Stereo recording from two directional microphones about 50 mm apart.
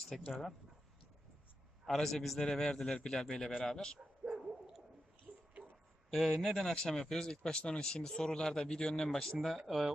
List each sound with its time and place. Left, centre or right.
0.1 s speech: centre
1.9 s a man's voice: centre
2.4 s speech: centre
4.2 s dog: centre
5.3 s a sound: centre
6.1 s a man's voice: centre
6.6 s a man's voice: centre